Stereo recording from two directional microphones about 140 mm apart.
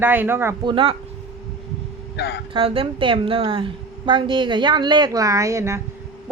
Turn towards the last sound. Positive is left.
turn(degrees=-20)  # may be behind; listen again after turning